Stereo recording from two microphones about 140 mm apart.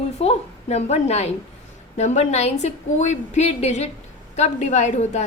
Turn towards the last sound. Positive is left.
turn(degrees=55)  # may be behind; listen again after turning